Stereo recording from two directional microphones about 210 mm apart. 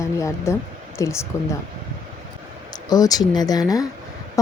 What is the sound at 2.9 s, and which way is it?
Speech, 15° left (ahead or behind).